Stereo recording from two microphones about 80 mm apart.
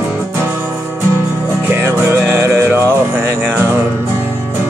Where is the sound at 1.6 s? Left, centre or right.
Right.